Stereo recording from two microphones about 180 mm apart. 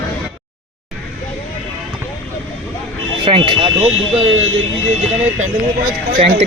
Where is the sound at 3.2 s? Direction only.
30° right (ahead or behind).